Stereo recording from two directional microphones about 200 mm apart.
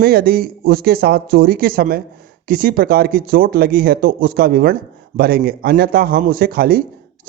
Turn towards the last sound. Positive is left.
turn(degrees=-45)  # may be behind; listen again after turning